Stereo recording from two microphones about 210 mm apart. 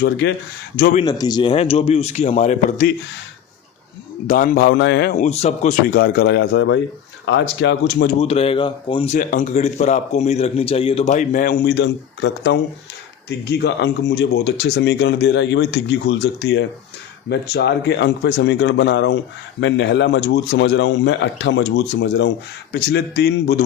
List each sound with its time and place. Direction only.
0.0 s speech: 60° left (ahead or behind)
0.8 s a man's voice: 40° left (ahead or behind)
1.0 s a man's voice: 20° left (ahead or behind); by 2.9 s 35° left (ahead or behind)
4.3 s speech: 40° left (ahead or behind)
5.1 s a man's voice: 35° left (ahead or behind)
5.9 s speech: 50° left (ahead or behind)
8.0 s a man's voice: 30° left (ahead or behind)
9.1 s a man's voice: 35° left (ahead or behind)